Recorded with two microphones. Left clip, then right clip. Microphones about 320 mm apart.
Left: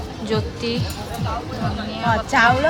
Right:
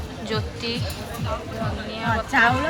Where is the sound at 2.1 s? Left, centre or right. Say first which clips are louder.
Left 2 dB; left.